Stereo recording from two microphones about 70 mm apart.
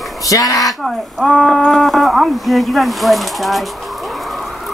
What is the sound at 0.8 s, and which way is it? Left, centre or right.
Speech, centre.